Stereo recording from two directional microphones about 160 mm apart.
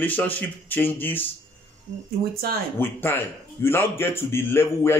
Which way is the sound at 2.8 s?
15° left (ahead or behind).